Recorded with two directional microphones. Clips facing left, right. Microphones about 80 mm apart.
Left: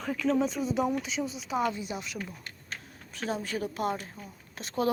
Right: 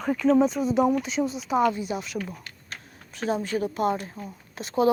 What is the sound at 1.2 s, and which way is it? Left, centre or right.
Speech, right.